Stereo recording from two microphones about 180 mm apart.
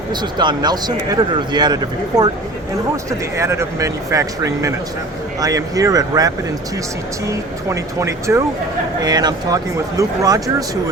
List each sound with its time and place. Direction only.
0.1 s speech: 25° right (ahead or behind)